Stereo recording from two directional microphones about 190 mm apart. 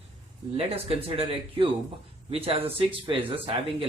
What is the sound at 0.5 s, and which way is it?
Speech, 30° right (ahead or behind).